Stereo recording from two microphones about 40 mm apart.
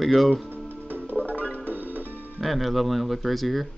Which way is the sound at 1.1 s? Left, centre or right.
Centre.